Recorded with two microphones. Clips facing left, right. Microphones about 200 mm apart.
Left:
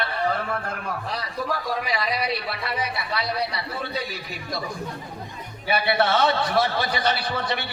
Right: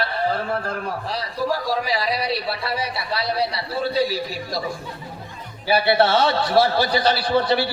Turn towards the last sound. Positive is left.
turn(degrees=-30)  # may be behind; listen again after turning